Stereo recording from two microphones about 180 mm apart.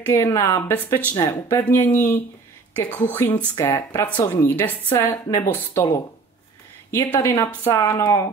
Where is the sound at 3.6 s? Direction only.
10° left (ahead or behind).